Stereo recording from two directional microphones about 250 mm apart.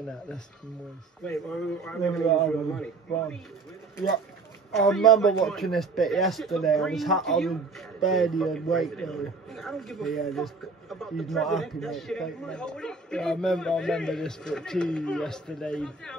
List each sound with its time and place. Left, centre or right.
1.2 s a man's voice: centre
4.8 s a man's voice: centre